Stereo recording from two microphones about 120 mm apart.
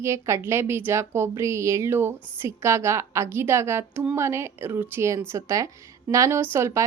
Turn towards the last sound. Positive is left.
turn(degrees=-25)  # may be behind; listen again after turning